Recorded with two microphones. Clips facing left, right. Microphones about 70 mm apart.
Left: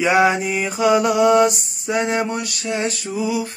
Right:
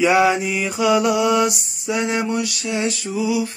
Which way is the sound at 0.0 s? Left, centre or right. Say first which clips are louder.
Even; left.